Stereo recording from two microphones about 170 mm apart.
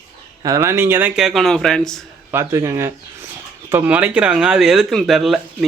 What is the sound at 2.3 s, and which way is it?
Speech, 15° right (ahead or behind).